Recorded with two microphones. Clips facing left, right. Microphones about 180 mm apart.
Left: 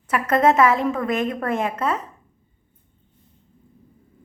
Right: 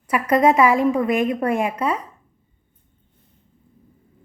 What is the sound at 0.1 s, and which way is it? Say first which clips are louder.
A woman's voice: right 1 dB; 10° right (ahead or behind).